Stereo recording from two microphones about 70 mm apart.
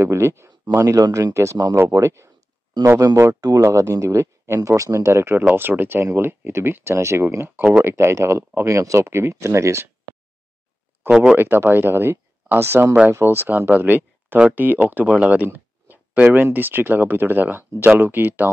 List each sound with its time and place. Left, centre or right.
0.0 s speech: right
3.3 s speech: right
3.6 s speech: right
5.4 s speech: right
11.1 s speech: centre
11.3 s speech: right